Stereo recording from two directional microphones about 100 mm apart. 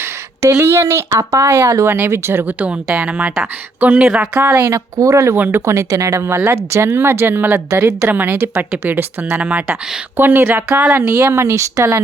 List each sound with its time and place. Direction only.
0.0 s speech: 30° right (ahead or behind); by 4.4 s 10° right (ahead or behind)
4.4 s a woman's voice: 30° right (ahead or behind)